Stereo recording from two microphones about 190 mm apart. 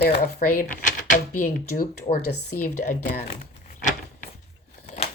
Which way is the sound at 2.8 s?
45° left (ahead or behind).